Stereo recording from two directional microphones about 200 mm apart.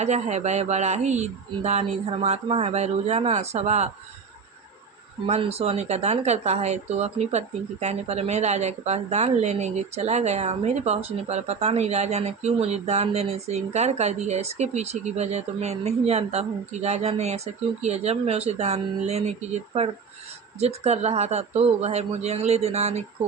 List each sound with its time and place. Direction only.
0.0 s a woman's voice: 35° right (ahead or behind)
5.2 s a woman's voice: 30° right (ahead or behind)